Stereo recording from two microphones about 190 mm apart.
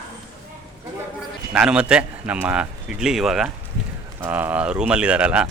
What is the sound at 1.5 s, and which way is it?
A man's voice, 5° right (ahead or behind).